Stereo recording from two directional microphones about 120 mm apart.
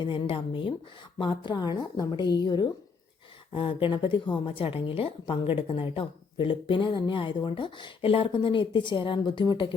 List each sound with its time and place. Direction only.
0.0 s a woman's voice: 45° left (ahead or behind)